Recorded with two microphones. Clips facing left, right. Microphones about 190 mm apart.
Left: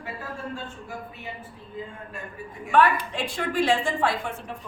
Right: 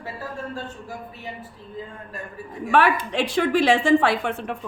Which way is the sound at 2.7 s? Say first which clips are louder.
Right 1 dB; 75° right (ahead or behind).